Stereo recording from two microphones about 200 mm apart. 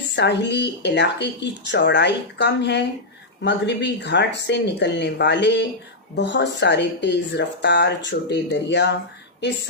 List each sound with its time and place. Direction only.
0.2 s speech: 60° left (ahead or behind)